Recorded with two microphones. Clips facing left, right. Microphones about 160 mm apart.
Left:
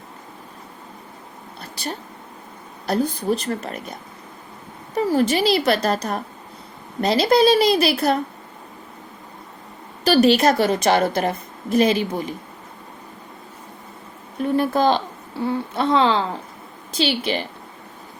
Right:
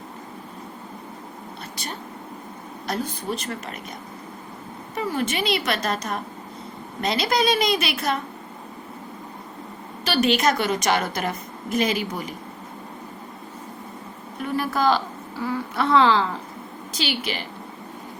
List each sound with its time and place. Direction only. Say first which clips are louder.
1.7 s a woman's voice: left 7 dB; 35° left (ahead or behind)
4.9 s a woman's voice: left 7 dB; 35° left (ahead or behind)
10.0 s a woman's voice: left 6 dB; 35° left (ahead or behind)
14.4 s a woman's voice: left 4 dB; 25° left (ahead or behind)